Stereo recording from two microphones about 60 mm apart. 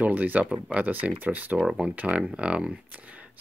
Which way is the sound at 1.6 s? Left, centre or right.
Centre.